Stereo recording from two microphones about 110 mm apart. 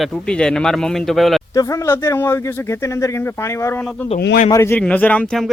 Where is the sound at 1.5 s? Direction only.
30° left (ahead or behind).